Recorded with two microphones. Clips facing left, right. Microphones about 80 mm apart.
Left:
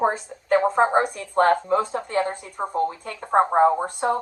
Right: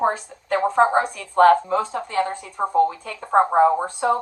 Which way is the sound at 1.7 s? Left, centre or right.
Left.